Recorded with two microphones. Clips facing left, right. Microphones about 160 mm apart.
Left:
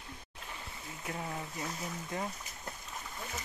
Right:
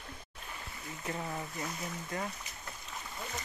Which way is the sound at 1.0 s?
5° left (ahead or behind).